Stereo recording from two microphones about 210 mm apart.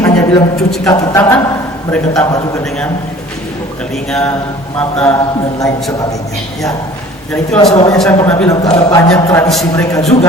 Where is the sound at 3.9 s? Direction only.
5° left (ahead or behind).